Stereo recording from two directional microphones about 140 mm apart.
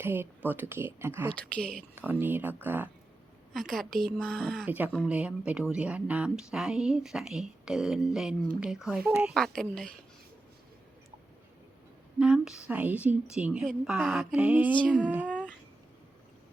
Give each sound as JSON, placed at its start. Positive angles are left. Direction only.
{"t": 0.0, "sound": "a woman's voice", "side_deg": -15}
{"t": 1.3, "sound": "a woman's voice", "side_deg": 10}
{"t": 2.0, "sound": "a woman's voice", "side_deg": -15}
{"t": 3.5, "sound": "speech", "side_deg": 0}
{"t": 4.6, "sound": "a woman's voice", "side_deg": -15}
{"t": 12.2, "sound": "a woman's voice", "side_deg": -5}